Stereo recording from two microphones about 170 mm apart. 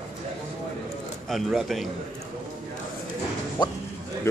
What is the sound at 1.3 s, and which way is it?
Speech, centre (ahead or behind).